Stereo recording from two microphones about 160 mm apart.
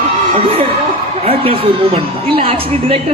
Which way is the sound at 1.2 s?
35° right (ahead or behind).